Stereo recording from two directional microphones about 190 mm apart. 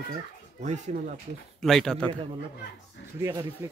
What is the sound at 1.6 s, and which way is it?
Speech, centre (ahead or behind).